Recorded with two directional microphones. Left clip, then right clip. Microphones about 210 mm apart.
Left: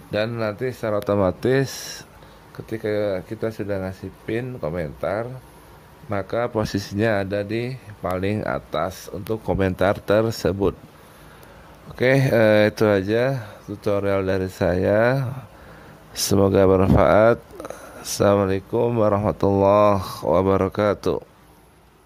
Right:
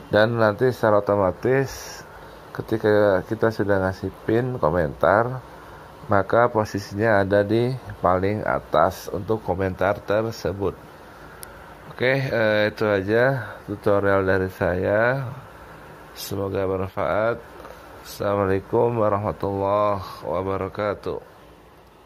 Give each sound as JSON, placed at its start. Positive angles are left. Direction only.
{"t": 0.1, "sound": "speech", "side_deg": -5}
{"t": 1.0, "sound": "speech", "side_deg": 40}
{"t": 2.8, "sound": "speech", "side_deg": 10}
{"t": 3.4, "sound": "speech", "side_deg": 0}
{"t": 6.6, "sound": "speech", "side_deg": 45}
{"t": 7.2, "sound": "speech", "side_deg": -5}
{"t": 8.2, "sound": "speech", "side_deg": 35}
{"t": 8.7, "sound": "speech", "side_deg": 0}
{"t": 9.5, "sound": "speech", "side_deg": 40}
{"t": 12.0, "sound": "speech", "side_deg": 40}
{"t": 13.0, "sound": "speech", "side_deg": 20}
{"t": 14.6, "sound": "speech", "side_deg": 35}
{"t": 18.5, "sound": "speech", "side_deg": 20}
{"t": 18.9, "sound": "speech", "side_deg": 35}